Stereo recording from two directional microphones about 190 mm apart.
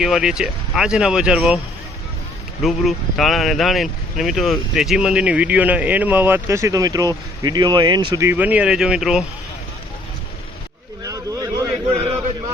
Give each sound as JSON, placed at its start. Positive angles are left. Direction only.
{"t": 0.0, "sound": "speech", "side_deg": -5}
{"t": 2.6, "sound": "speech", "side_deg": 0}
{"t": 11.0, "sound": "a sound", "side_deg": -20}